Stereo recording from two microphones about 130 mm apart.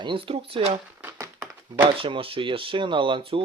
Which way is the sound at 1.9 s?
45° right (ahead or behind).